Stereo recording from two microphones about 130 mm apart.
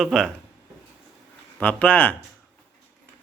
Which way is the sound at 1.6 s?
10° left (ahead or behind).